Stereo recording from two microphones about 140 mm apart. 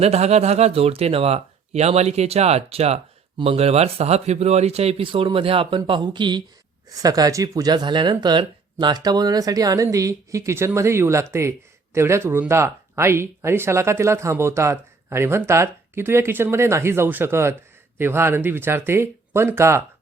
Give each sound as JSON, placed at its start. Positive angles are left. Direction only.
{"t": 0.0, "sound": "speech", "side_deg": -50}